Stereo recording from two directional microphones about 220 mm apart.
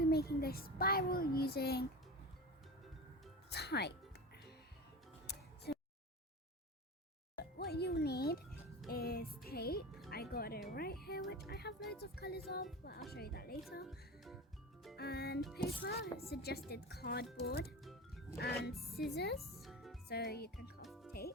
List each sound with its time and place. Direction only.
0.0 s a child's voice: 45° left (ahead or behind)
3.5 s speech: 50° left (ahead or behind)
5.2 s music: 50° left (ahead or behind)
7.3 s music: 45° left (ahead or behind)
11.9 s speech: 45° left (ahead or behind)
13.8 s music: centre (ahead or behind)
14.9 s music: 45° left (ahead or behind)
15.5 s speech: 45° left (ahead or behind)
19.4 s music: centre (ahead or behind)
20.1 s speech: 45° left (ahead or behind)
20.8 s music: centre (ahead or behind)
21.1 s music: 45° left (ahead or behind)